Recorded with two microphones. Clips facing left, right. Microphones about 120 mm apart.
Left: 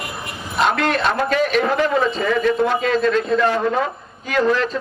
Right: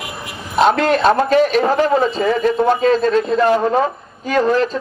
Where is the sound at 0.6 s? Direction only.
35° right (ahead or behind).